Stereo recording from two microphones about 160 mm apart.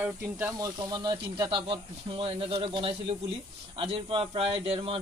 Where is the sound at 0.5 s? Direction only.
25° right (ahead or behind).